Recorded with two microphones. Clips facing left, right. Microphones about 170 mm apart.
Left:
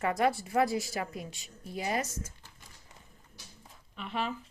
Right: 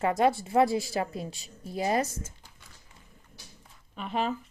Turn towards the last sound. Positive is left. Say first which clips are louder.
# right 5 dB
turn(degrees=-40)  # may be behind; listen again after turning